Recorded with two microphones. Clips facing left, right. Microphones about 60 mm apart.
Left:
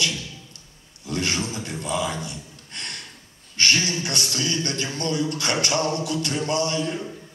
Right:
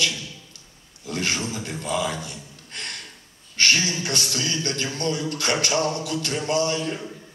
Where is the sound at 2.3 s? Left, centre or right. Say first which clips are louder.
Even; right.